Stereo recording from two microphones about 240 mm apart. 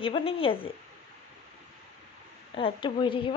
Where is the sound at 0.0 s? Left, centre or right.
Left.